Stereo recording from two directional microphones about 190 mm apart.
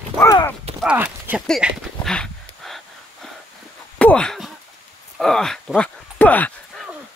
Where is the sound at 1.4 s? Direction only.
Centre (ahead or behind).